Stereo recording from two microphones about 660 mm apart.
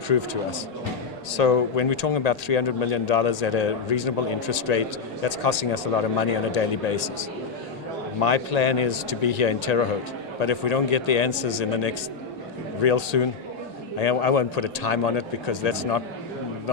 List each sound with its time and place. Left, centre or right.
1.3 s speech: left